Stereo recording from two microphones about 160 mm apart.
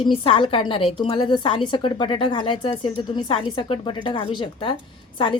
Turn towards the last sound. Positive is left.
turn(degrees=30)  # may be behind; listen again after turning